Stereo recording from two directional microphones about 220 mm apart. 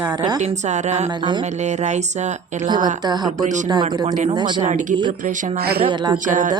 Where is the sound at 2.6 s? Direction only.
20° right (ahead or behind).